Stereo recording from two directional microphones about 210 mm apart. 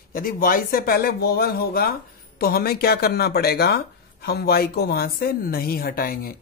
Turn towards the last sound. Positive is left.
turn(degrees=45)  # may be behind; listen again after turning